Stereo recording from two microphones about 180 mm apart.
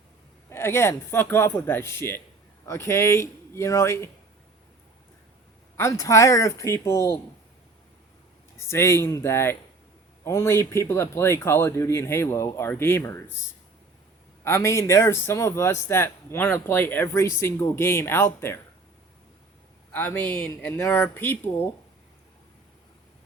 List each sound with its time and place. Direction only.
0.5 s speech: 15° left (ahead or behind)
5.7 s speech: 15° left (ahead or behind)
8.5 s speech: 15° left (ahead or behind)
14.4 s speech: 15° left (ahead or behind)
19.9 s speech: 10° left (ahead or behind)